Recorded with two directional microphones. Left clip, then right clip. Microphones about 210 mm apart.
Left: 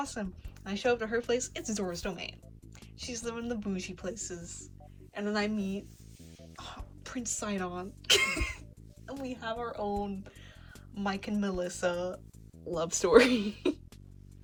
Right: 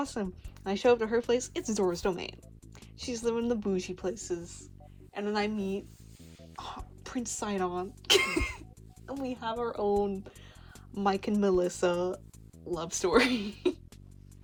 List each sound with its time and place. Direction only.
0.0 s speech: 20° right (ahead or behind)
12.7 s speech: centre (ahead or behind)